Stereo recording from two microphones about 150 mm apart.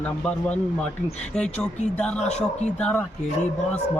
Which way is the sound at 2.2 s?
50° left (ahead or behind).